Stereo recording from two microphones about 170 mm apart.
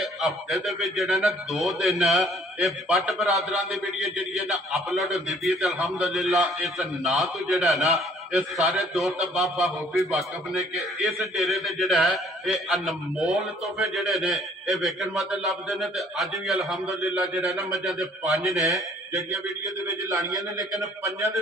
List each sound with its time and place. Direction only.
0.0 s speech: centre (ahead or behind)
10.8 s speech: centre (ahead or behind)
19.9 s a man's voice: 20° right (ahead or behind)